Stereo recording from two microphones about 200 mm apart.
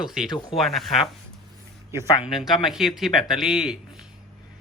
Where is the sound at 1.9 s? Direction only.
15° right (ahead or behind).